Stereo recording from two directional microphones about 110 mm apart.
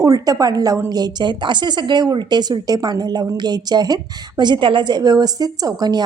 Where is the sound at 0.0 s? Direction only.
30° right (ahead or behind).